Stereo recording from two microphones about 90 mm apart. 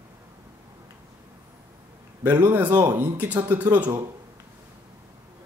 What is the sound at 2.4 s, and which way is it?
Speech, 20° right (ahead or behind).